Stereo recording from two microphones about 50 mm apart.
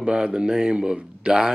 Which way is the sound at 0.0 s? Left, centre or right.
Centre.